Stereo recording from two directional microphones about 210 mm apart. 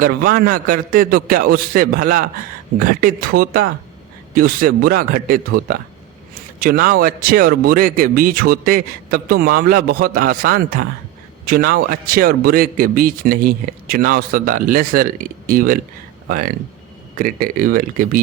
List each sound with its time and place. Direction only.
0.0 s speech: 45° right (ahead or behind)
17.2 s speech: 40° right (ahead or behind)